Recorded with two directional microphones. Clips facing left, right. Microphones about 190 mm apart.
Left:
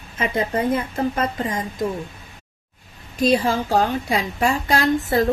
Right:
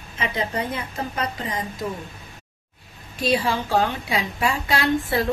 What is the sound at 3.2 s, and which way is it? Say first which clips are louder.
A woman's voice: left 4 dB; 45° left (ahead or behind).